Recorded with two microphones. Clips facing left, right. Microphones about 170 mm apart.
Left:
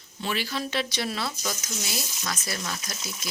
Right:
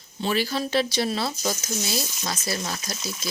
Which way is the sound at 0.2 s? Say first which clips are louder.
Right 5 dB; 35° right (ahead or behind).